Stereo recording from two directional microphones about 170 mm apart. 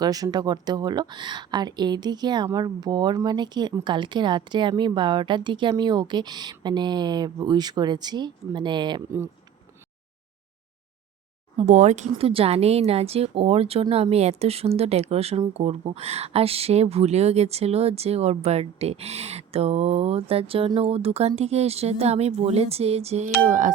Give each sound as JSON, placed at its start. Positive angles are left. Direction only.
{"t": 0.0, "sound": "speech", "side_deg": -20}
{"t": 11.5, "sound": "speech", "side_deg": -45}
{"t": 23.4, "sound": "speech", "side_deg": -50}